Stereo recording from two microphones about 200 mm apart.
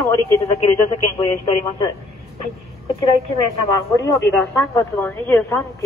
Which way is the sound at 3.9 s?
15° left (ahead or behind).